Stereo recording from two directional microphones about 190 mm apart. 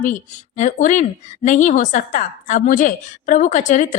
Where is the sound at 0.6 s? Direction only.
40° left (ahead or behind).